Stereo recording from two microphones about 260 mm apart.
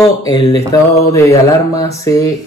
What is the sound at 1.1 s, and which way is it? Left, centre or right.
Speech, centre.